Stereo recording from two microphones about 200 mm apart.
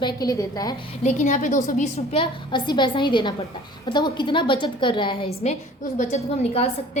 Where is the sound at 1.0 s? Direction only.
40° left (ahead or behind).